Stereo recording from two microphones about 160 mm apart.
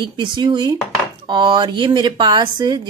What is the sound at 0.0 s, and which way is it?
Cutlery, 30° right (ahead or behind).